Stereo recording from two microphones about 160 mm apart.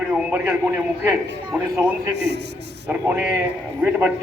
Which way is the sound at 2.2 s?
90° right.